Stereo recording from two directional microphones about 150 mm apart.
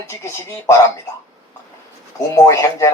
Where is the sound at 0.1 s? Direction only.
15° left (ahead or behind).